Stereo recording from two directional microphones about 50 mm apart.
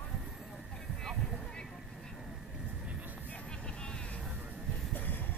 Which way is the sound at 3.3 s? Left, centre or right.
Centre.